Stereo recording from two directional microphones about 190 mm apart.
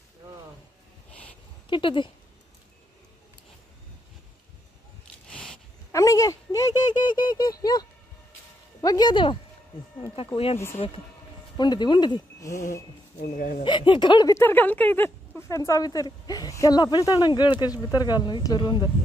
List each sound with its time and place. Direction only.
1.7 s speech: 25° left (ahead or behind)
5.3 s dog: 5° left (ahead or behind)
5.9 s a sound: 20° left (ahead or behind)
8.8 s a sound: 20° left (ahead or behind)
10.1 s speech: 30° left (ahead or behind)
13.2 s speech: 50° left (ahead or behind)
13.6 s speech: 25° left (ahead or behind)